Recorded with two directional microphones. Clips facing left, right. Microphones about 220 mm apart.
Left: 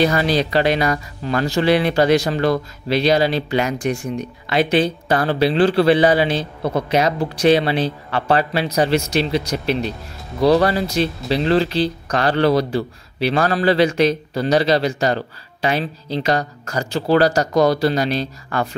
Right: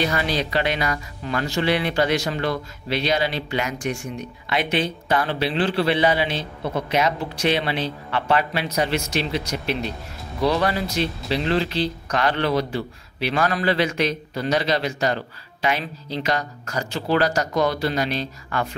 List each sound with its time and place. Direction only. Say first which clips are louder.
0.0 s speech: left 6 dB; 40° left (ahead or behind)